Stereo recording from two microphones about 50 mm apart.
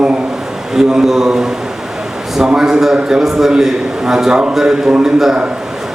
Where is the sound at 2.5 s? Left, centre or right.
Centre.